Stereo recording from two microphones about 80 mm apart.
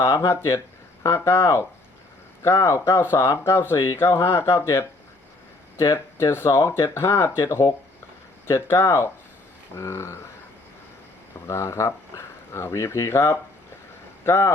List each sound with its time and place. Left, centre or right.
0.0 s speech: left
11.4 s speech: left